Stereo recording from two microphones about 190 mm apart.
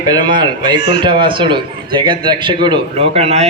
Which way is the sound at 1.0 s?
25° right (ahead or behind).